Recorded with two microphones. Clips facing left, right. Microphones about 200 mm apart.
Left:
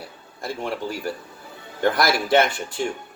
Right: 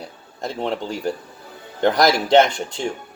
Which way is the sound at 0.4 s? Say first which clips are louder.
Right 3 dB; 20° right (ahead or behind).